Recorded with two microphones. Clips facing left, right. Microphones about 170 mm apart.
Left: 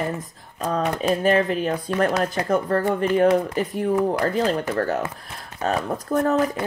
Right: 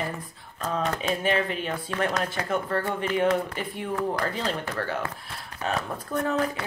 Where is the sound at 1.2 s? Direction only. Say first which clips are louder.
Left 7 dB; 40° left (ahead or behind).